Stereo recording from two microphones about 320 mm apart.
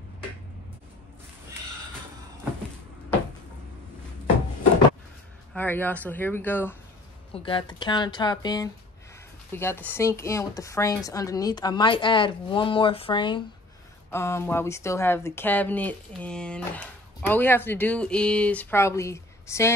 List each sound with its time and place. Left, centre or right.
5.5 s speech: centre